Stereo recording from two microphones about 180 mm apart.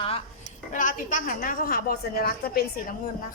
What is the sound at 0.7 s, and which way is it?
A woman's voice, 45° left (ahead or behind).